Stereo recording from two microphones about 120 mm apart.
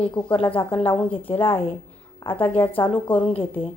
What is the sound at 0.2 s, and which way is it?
A woman's voice, 45° left (ahead or behind).